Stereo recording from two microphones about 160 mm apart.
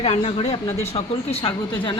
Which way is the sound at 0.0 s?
40° left (ahead or behind).